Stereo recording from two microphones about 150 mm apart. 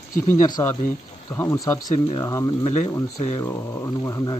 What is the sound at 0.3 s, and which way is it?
Speech, 20° left (ahead or behind).